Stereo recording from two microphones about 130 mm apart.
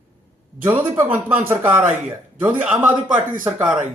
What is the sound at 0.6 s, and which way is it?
A man's voice, 15° right (ahead or behind).